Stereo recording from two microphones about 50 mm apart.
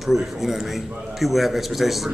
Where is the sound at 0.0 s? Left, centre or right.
Centre.